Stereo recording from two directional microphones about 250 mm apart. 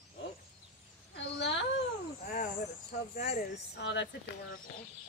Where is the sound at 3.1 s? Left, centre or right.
Left.